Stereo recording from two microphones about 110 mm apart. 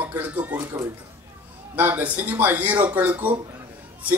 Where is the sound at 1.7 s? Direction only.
15° right (ahead or behind).